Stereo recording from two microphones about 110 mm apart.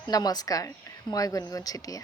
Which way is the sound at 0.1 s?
35° left (ahead or behind).